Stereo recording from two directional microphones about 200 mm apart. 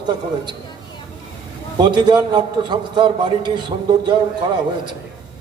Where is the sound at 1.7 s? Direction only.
20° right (ahead or behind).